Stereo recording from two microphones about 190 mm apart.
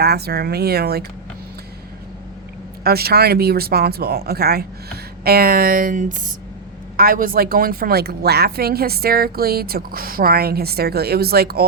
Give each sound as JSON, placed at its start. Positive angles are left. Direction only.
{"t": 0.0, "sound": "speech", "side_deg": -55}
{"t": 2.8, "sound": "a woman's voice", "side_deg": -55}